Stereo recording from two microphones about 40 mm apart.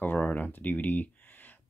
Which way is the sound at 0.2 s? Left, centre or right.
Left.